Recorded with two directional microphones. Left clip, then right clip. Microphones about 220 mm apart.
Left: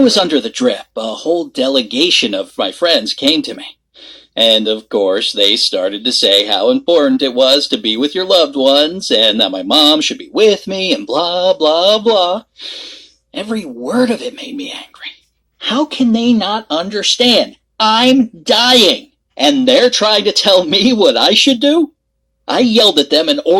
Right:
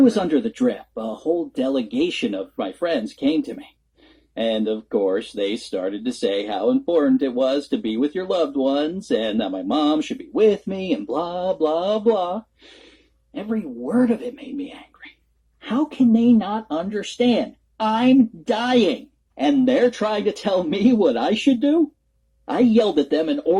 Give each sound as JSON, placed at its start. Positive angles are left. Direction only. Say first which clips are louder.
{"t": 0.0, "sound": "speech", "louder": "left 7 dB", "side_deg": 20}